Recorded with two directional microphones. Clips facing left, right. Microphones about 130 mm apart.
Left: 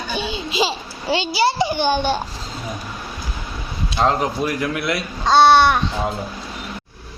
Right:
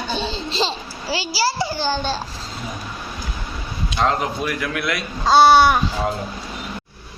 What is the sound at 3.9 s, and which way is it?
A man's voice, 30° left (ahead or behind).